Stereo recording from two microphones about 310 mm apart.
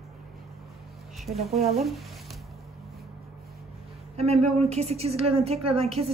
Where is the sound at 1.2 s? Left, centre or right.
Centre.